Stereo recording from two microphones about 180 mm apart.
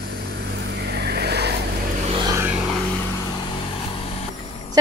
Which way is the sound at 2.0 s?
30° right (ahead or behind).